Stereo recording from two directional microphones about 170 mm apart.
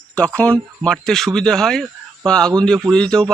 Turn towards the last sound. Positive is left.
turn(degrees=5)  # may be behind; listen again after turning